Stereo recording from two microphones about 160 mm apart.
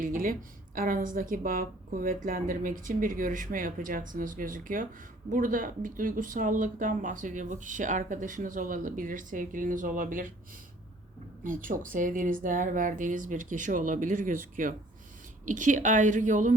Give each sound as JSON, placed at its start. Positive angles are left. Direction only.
{"t": 0.0, "sound": "speech", "side_deg": -55}
{"t": 11.4, "sound": "a woman's voice", "side_deg": -55}